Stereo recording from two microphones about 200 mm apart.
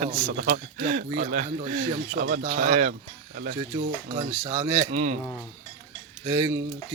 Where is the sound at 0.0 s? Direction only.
30° right (ahead or behind).